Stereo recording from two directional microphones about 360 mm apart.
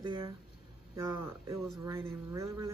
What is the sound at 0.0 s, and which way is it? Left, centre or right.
Speech, centre.